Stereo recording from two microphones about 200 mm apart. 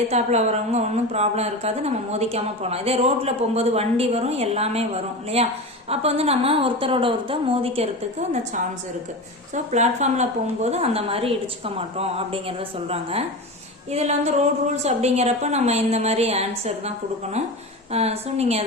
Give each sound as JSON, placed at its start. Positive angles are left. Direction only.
{"t": 0.1, "sound": "a woman's voice", "side_deg": -35}
{"t": 9.7, "sound": "speech", "side_deg": -35}
{"t": 17.9, "sound": "speech", "side_deg": -30}